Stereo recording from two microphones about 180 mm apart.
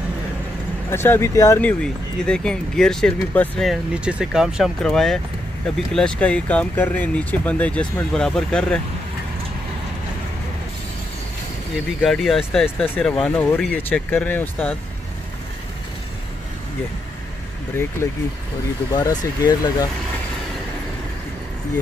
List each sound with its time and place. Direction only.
0.9 s speech: 15° left (ahead or behind)
1.7 s speech: 5° left (ahead or behind)
12.0 s speech: centre (ahead or behind)
18.9 s speech: 20° left (ahead or behind)